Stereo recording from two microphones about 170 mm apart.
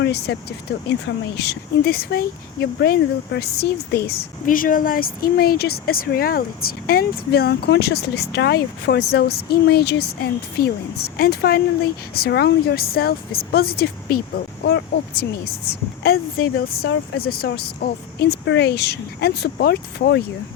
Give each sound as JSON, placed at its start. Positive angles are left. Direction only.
{"t": 0.0, "sound": "speech", "side_deg": 75}
{"t": 16.0, "sound": "speech", "side_deg": 65}